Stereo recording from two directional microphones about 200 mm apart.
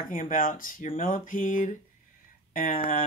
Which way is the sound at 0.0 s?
40° left (ahead or behind).